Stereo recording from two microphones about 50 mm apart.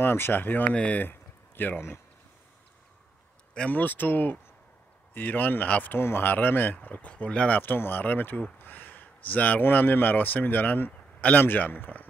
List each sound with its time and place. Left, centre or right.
0.0 s a man's voice: left
0.7 s speech: left
1.0 s a sound: left
3.7 s a man's voice: left
5.9 s speech: left
6.2 s a man's voice: left
7.6 s a man's voice: left
10.9 s a sound: left
11.3 s a man's voice: left